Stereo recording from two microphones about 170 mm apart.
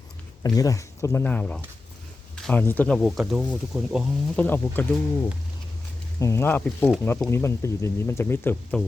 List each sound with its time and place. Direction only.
0.4 s speech: 20° left (ahead or behind); by 4.0 s 5° right (ahead or behind)
4.4 s speech: 10° left (ahead or behind)
6.1 s speech: 15° left (ahead or behind)